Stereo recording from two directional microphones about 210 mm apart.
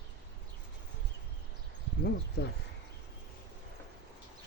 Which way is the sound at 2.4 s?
50° left (ahead or behind).